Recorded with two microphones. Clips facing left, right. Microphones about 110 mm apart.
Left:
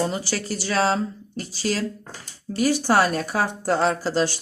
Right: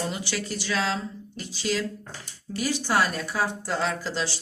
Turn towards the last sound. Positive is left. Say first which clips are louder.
# left 7 dB
turn(degrees=45)  # may be behind; listen again after turning